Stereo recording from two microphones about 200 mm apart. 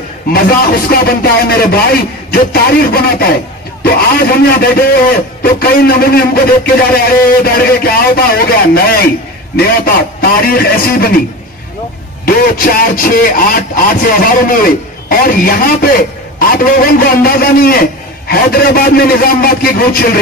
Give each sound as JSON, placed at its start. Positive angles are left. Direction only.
{"t": 0.3, "sound": "speech", "side_deg": 50}
{"t": 12.3, "sound": "speech", "side_deg": 45}